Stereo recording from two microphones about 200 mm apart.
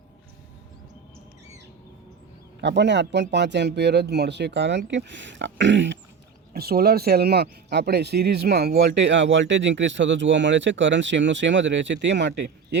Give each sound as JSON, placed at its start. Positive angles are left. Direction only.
{"t": 2.6, "sound": "speech", "side_deg": -60}
{"t": 6.5, "sound": "speech", "side_deg": -50}